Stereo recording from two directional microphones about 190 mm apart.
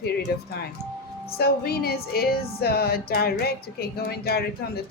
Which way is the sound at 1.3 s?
55° left (ahead or behind).